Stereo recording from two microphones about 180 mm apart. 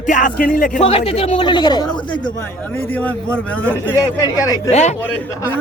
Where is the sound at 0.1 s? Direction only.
50° left (ahead or behind).